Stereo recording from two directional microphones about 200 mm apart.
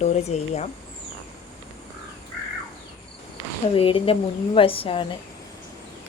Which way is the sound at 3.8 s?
25° left (ahead or behind).